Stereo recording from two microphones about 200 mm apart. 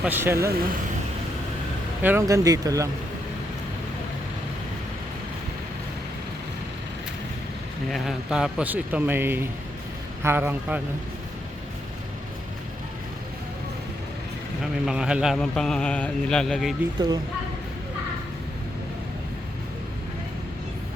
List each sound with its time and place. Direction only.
0.0 s speech: 10° right (ahead or behind)
2.0 s speech: 10° right (ahead or behind)
7.9 s speech: centre (ahead or behind)
14.6 s a man's voice: 5° right (ahead or behind)